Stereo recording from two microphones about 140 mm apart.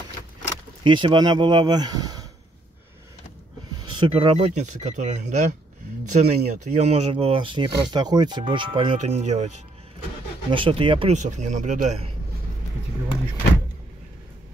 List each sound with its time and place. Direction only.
0.8 s speech: 35° right (ahead or behind)
3.8 s speech: 35° right (ahead or behind)
4.4 s speech: 60° right (ahead or behind); by 8.9 s 35° right (ahead or behind)
8.9 s speech: 55° right (ahead or behind)
10.5 s speech: 40° right (ahead or behind)
11.1 s speech: 60° right (ahead or behind)